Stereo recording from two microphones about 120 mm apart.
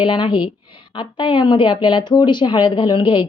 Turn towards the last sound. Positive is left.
turn(degrees=40)  # may be behind; listen again after turning